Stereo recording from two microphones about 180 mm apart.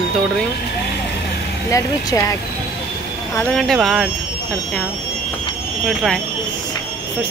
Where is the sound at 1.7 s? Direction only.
15° left (ahead or behind).